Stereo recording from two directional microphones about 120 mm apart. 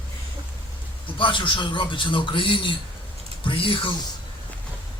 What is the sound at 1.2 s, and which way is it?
A man's voice, 45° left (ahead or behind).